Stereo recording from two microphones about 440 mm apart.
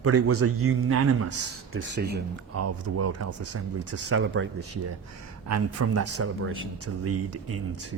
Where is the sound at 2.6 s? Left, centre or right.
Right.